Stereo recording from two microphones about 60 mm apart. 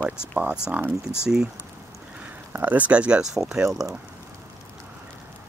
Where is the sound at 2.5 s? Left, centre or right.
Right; by 3.6 s centre.